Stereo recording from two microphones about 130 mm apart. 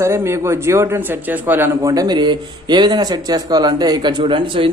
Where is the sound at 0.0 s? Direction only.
20° right (ahead or behind).